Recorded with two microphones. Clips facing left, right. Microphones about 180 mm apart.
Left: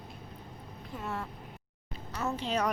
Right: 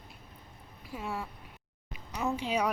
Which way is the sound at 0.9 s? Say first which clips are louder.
Right 1 dB; 10° right (ahead or behind).